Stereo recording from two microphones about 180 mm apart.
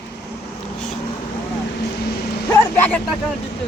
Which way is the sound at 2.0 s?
65° left (ahead or behind).